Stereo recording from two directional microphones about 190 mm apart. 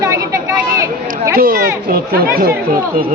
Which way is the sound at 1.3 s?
50° right (ahead or behind).